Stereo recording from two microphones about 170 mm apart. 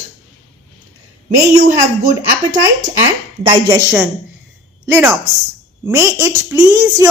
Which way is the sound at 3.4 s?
25° right (ahead or behind).